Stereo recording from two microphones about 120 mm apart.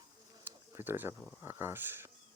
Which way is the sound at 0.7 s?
20° right (ahead or behind).